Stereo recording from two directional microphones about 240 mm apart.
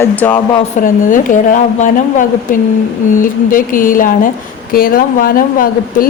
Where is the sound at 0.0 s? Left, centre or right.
Centre.